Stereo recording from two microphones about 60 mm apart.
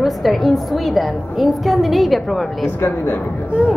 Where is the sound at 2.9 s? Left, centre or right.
Left.